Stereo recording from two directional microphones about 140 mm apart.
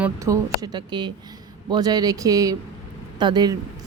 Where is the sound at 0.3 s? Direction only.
30° right (ahead or behind).